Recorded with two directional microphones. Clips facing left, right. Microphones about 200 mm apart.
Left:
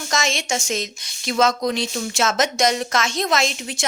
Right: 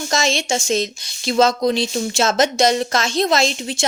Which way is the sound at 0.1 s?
30° right (ahead or behind).